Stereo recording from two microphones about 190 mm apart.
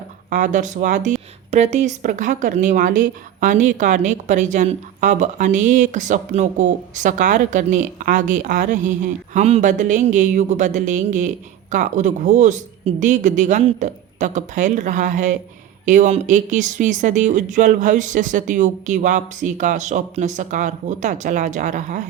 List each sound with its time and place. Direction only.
0.3 s speech: 40° right (ahead or behind)